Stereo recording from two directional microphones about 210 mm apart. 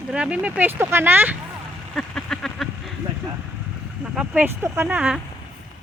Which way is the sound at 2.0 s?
5° left (ahead or behind).